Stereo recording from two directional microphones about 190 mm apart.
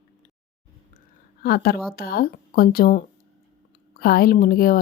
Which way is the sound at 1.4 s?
55° left (ahead or behind).